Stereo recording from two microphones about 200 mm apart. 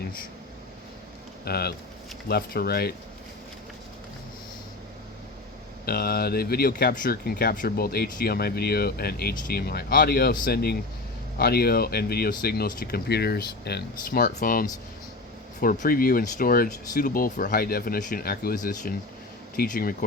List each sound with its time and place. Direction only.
1.5 s speech: 50° left (ahead or behind)
5.8 s speech: 50° left (ahead or behind)